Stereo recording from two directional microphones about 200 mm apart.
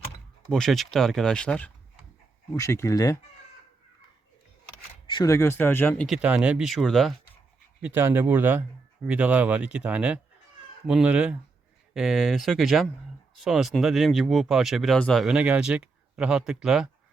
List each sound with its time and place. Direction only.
0.5 s speech: centre (ahead or behind)
5.0 s speech: 20° left (ahead or behind)
6.2 s speech: 5° right (ahead or behind)
7.8 s speech: 10° right (ahead or behind)